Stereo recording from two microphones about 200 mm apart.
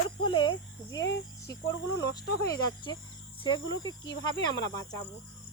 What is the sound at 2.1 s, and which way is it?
Speech, 20° left (ahead or behind).